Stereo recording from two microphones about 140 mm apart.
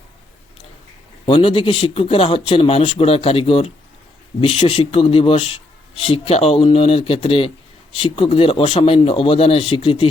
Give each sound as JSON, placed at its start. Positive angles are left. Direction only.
{"t": 1.2, "sound": "speech", "side_deg": 40}